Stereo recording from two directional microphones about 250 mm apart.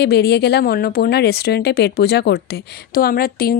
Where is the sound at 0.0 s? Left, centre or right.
Left.